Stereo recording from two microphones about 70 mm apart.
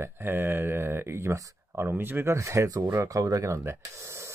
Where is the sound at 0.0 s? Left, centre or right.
Right.